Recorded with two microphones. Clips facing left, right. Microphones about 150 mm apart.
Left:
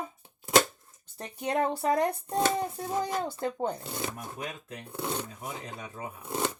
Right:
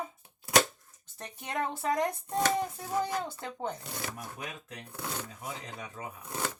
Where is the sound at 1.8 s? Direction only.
30° left (ahead or behind).